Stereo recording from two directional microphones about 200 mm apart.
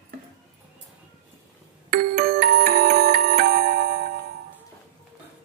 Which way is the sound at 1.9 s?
45° right (ahead or behind).